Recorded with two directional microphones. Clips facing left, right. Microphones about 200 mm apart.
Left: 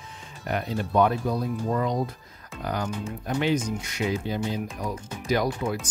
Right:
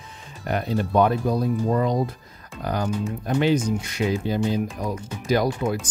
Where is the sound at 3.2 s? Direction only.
35° right (ahead or behind).